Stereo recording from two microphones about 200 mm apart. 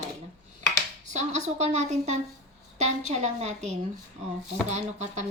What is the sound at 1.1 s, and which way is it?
Speech, 35° right (ahead or behind).